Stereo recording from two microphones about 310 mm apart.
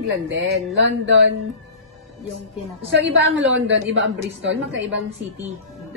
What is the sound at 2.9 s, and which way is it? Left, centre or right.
A woman's voice, right.